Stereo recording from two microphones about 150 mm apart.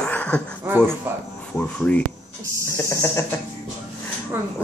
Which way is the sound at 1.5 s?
10° left (ahead or behind).